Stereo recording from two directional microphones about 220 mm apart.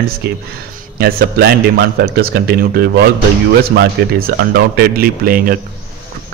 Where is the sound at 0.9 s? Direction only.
45° right (ahead or behind).